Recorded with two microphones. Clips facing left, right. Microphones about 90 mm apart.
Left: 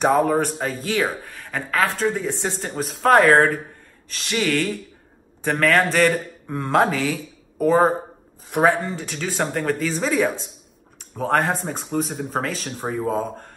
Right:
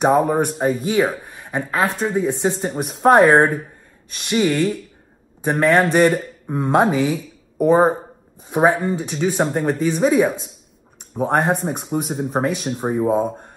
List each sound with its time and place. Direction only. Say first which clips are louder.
0.0 s speech: right 2 dB; 15° right (ahead or behind)